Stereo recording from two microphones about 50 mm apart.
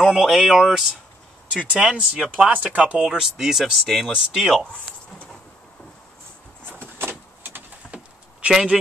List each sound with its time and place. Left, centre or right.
0.0 s speech: centre
1.8 s speech: centre
2.3 s speech: right; by 4.6 s centre
7.0 s vehicle: right
8.5 s speech: centre